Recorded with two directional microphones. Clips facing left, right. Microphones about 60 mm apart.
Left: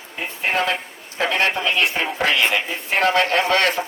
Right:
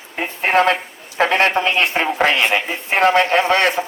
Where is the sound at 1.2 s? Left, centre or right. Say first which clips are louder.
Right 5 dB; right.